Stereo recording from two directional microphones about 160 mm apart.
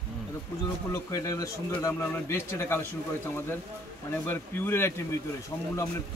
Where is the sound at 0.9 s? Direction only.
20° left (ahead or behind).